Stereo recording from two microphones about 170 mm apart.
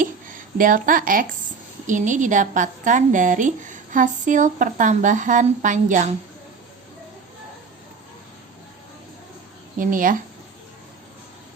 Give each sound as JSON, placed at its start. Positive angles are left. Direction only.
{"t": 0.0, "sound": "a sound", "side_deg": -50}
{"t": 1.9, "sound": "a woman's voice", "side_deg": -45}
{"t": 9.7, "sound": "a woman's voice", "side_deg": -50}